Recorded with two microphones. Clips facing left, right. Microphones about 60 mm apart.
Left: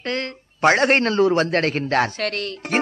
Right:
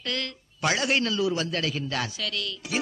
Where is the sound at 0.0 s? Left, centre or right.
Left.